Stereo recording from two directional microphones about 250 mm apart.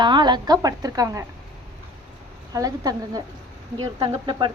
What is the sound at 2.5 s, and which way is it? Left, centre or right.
A woman's voice, centre.